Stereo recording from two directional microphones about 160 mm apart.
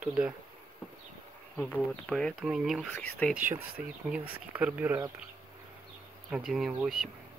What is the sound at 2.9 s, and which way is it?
Speech, 10° left (ahead or behind).